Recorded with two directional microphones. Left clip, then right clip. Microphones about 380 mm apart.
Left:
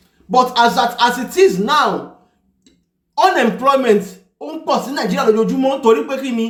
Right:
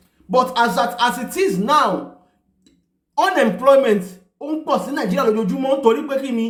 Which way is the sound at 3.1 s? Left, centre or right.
Centre.